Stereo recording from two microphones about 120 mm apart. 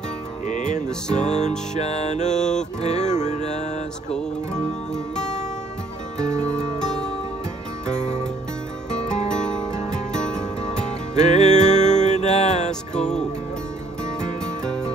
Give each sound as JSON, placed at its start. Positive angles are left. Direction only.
{"t": 0.5, "sound": "music", "side_deg": 85}
{"t": 0.8, "sound": "music", "side_deg": 5}
{"t": 1.2, "sound": "music", "side_deg": 70}
{"t": 4.1, "sound": "music", "side_deg": 5}
{"t": 6.2, "sound": "music", "side_deg": -25}
{"t": 6.8, "sound": "music", "side_deg": 5}
{"t": 8.9, "sound": "music", "side_deg": 5}
{"t": 11.1, "sound": "music", "side_deg": 75}
{"t": 14.4, "sound": "music", "side_deg": 5}